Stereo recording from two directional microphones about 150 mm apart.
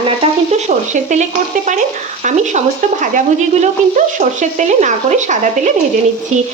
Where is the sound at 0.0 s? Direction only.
40° right (ahead or behind).